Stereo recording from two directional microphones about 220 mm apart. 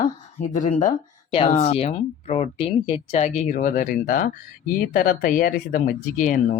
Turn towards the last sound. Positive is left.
turn(degrees=35)  # may be behind; listen again after turning